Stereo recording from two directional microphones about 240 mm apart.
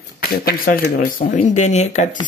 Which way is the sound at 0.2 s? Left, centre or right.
Left.